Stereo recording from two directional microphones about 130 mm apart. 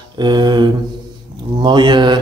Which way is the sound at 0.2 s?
35° right (ahead or behind).